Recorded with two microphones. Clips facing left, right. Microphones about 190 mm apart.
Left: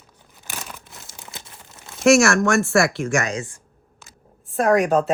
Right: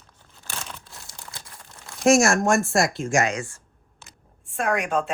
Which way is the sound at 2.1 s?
70° left (ahead or behind).